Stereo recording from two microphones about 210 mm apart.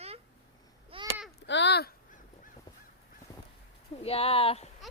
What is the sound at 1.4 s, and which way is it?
Honk, 55° left (ahead or behind).